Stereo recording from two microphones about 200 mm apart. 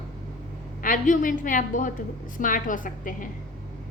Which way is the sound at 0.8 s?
40° left (ahead or behind).